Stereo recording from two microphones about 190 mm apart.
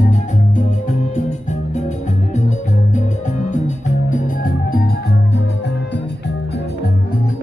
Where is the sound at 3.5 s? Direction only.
40° left (ahead or behind).